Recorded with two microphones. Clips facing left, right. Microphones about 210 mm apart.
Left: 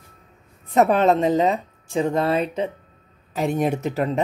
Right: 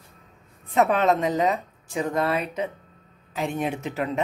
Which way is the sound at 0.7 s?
35° left (ahead or behind).